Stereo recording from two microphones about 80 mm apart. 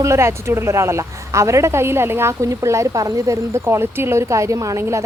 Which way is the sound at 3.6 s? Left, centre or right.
Right.